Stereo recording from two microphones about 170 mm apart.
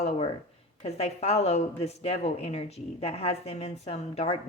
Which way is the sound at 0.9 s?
40° left (ahead or behind).